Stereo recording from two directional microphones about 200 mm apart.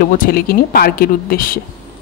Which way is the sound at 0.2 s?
50° left (ahead or behind).